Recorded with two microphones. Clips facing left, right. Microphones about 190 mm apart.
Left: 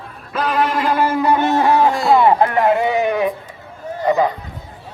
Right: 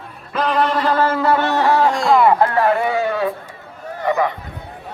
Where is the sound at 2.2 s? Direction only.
20° left (ahead or behind).